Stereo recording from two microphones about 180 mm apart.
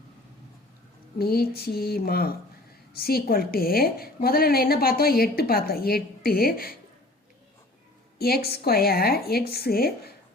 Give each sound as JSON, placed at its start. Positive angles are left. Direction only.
{"t": 1.2, "sound": "a woman's voice", "side_deg": 60}
{"t": 8.4, "sound": "a woman's voice", "side_deg": 60}